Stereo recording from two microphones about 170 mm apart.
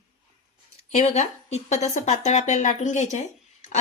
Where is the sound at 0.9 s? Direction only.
45° left (ahead or behind).